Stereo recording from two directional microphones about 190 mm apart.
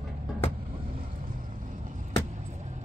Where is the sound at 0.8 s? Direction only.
45° right (ahead or behind).